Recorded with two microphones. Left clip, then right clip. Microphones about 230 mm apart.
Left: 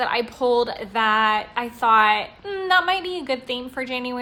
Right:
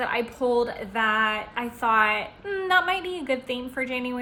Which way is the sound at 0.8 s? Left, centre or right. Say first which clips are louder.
Left 4 dB; centre.